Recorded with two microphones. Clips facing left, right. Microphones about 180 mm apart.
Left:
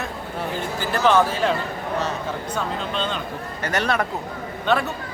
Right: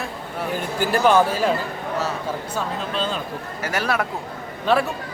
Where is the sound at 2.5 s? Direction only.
5° right (ahead or behind).